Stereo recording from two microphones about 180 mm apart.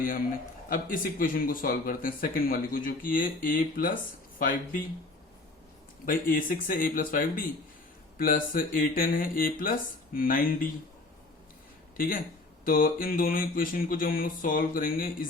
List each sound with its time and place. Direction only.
0.7 s speech: 50° left (ahead or behind)
6.1 s speech: 50° left (ahead or behind)
11.9 s speech: 50° left (ahead or behind)